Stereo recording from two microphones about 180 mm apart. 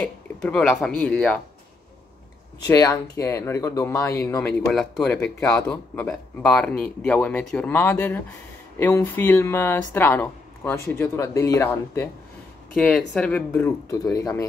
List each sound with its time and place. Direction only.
0.0 s speech: 5° left (ahead or behind)
2.6 s speech: 20° left (ahead or behind)
4.6 s speech: 5° left (ahead or behind)
12.7 s speech: 5° left (ahead or behind)